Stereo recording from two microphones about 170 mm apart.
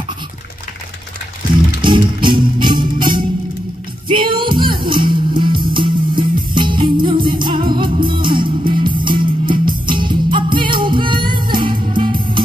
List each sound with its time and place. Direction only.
1.9 s music: 30° right (ahead or behind)